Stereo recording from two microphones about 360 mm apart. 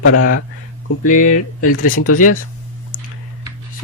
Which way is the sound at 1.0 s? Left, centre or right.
Left.